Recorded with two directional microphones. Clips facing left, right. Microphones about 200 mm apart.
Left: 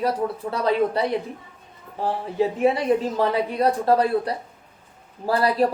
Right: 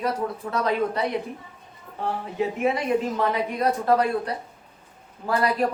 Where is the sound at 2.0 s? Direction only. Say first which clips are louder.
Left 4 dB; 30° left (ahead or behind).